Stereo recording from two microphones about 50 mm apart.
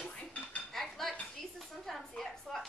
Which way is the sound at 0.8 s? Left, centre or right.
Centre.